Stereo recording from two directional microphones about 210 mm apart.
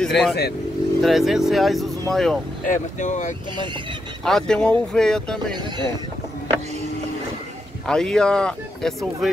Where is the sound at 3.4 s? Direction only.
20° right (ahead or behind).